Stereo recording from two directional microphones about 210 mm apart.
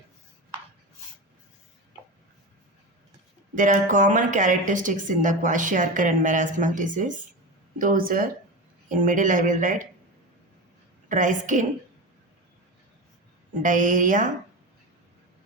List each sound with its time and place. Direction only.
3.5 s a woman's voice: 40° right (ahead or behind)
11.1 s a woman's voice: 40° right (ahead or behind)
13.6 s a woman's voice: 40° right (ahead or behind)